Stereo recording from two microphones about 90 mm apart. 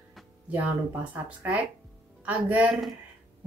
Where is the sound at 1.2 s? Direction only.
15° right (ahead or behind).